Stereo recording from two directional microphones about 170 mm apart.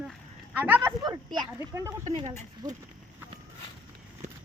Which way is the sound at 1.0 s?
25° right (ahead or behind).